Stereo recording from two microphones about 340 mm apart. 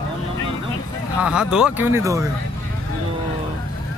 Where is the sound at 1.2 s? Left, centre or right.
Centre.